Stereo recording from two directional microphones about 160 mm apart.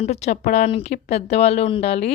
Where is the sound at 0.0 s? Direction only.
45° left (ahead or behind).